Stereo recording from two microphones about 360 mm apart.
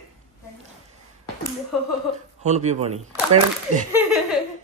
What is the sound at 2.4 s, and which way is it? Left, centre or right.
Speech, centre.